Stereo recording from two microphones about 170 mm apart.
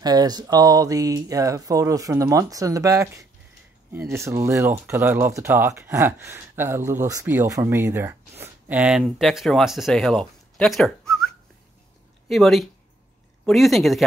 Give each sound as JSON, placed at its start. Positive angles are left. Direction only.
{"t": 0.0, "sound": "speech", "side_deg": -25}